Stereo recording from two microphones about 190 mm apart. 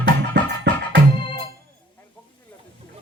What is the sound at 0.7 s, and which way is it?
Music, 65° right (ahead or behind).